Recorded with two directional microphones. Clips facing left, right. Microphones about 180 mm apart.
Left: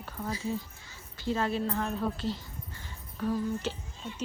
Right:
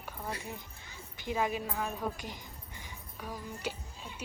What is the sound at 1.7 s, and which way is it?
A woman's voice, 5° right (ahead or behind).